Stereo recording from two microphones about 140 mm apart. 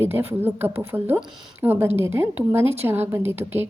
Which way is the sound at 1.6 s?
15° right (ahead or behind).